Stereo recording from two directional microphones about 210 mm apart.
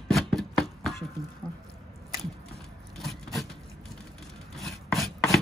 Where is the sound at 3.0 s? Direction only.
Centre (ahead or behind).